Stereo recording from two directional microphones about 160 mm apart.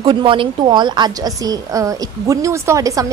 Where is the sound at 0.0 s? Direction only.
30° right (ahead or behind).